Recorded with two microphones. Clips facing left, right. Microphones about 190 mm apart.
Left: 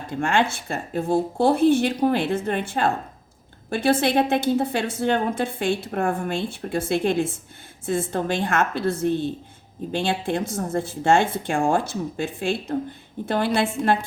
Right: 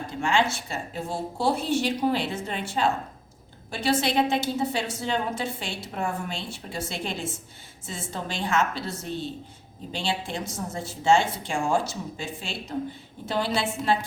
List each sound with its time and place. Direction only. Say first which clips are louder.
0.1 s a woman's voice: left 3 dB; 55° left (ahead or behind)